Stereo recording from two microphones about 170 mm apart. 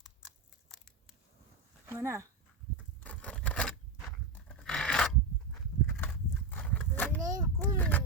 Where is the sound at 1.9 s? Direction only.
15° right (ahead or behind).